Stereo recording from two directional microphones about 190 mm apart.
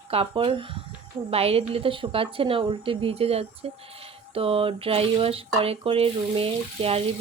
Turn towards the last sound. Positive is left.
turn(degrees=-30)  # may be behind; listen again after turning